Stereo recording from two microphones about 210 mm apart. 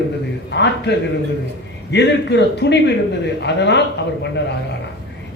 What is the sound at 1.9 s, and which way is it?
A man's voice, 55° left (ahead or behind).